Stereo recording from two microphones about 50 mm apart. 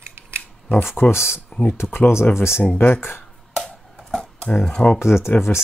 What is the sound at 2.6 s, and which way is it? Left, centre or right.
Speech, left.